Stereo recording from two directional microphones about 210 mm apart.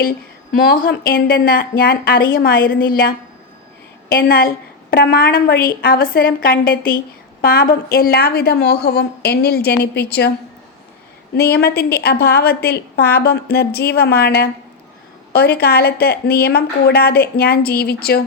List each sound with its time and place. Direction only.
0.6 s a woman's voice: 45° left (ahead or behind)
4.1 s a woman's voice: 45° left (ahead or behind)
11.3 s a woman's voice: 50° left (ahead or behind)